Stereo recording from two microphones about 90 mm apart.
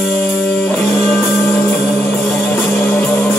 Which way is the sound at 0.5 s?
15° left (ahead or behind).